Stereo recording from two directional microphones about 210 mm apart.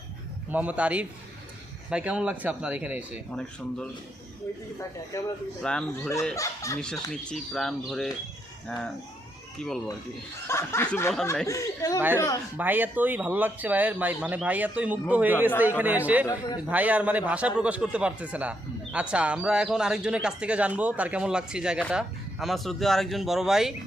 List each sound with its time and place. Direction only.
0.5 s speech: 5° right (ahead or behind)
5.1 s speech: 15° left (ahead or behind)
5.6 s a man's voice: 5° left (ahead or behind)
6.3 s speech: 15° left (ahead or behind)
6.8 s a man's voice: 5° left (ahead or behind)
10.4 s speech: 10° left (ahead or behind)
11.9 s a man's voice: 10° right (ahead or behind)